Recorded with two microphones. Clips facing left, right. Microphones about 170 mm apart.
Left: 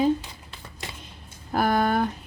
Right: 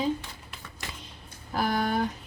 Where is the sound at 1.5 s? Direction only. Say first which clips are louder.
Left 5 dB; 55° left (ahead or behind).